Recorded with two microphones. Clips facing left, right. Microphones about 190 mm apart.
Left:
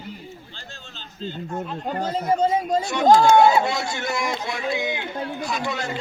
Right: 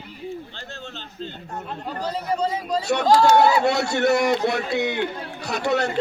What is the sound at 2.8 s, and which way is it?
Speech, 65° right (ahead or behind).